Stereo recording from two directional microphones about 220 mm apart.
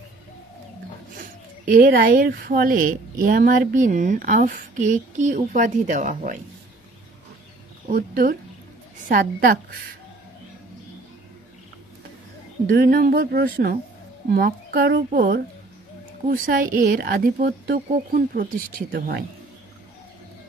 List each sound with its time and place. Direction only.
1.7 s speech: 40° right (ahead or behind)
7.9 s speech: 40° right (ahead or behind)
12.6 s speech: 40° right (ahead or behind)